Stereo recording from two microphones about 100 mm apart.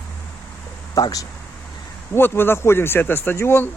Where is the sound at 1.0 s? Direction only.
40° left (ahead or behind).